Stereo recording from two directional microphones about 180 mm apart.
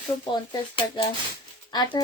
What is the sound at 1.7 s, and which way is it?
Speech, 25° left (ahead or behind).